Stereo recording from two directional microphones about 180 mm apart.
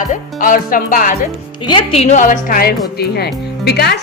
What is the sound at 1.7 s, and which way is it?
A woman's voice, 30° left (ahead or behind).